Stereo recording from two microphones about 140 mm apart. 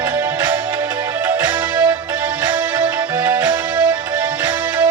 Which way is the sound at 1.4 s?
25° right (ahead or behind).